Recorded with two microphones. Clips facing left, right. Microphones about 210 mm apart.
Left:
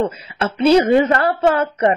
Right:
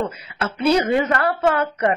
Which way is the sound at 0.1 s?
30° left (ahead or behind).